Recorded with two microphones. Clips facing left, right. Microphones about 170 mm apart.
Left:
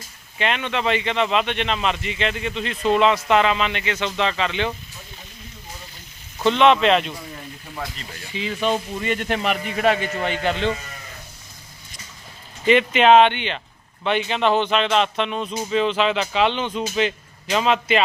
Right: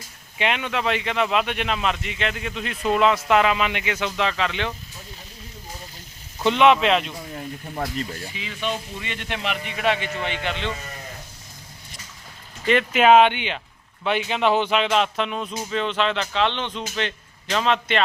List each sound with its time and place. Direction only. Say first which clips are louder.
0.3 s speech: left 1 dB; 10° right (ahead or behind)
6.4 s speech: left 1 dB; 5° right (ahead or behind)
7.8 s speech: right 5 dB; 45° right (ahead or behind)
8.3 s speech: left 12 dB; 35° left (ahead or behind)
12.6 s speech: left 2 dB; centre (ahead or behind)